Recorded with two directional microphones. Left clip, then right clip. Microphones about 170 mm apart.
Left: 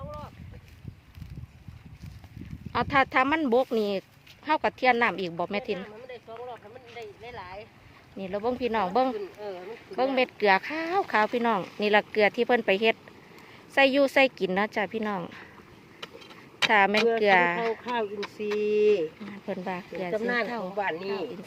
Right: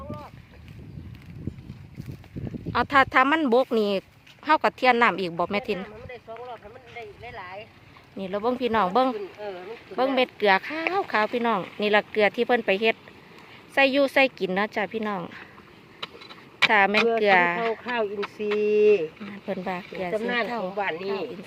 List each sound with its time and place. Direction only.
2.7 s speech: 10° right (ahead or behind)
7.0 s a sound: 15° right (ahead or behind)
8.2 s speech: 15° right (ahead or behind)
16.3 s a sound: centre (ahead or behind)
17.2 s speech: centre (ahead or behind)
17.9 s speech: 25° right (ahead or behind)
19.2 s speech: centre (ahead or behind)